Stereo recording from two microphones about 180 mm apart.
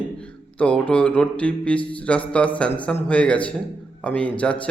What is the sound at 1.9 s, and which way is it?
A man's voice, 5° left (ahead or behind).